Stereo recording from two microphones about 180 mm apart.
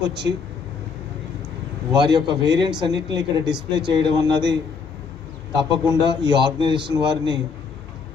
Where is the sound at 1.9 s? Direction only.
25° right (ahead or behind).